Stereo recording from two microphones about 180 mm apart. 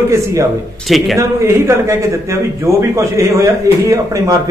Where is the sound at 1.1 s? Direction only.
15° right (ahead or behind).